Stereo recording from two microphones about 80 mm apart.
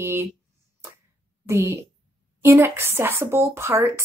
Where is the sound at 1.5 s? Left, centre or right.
Right.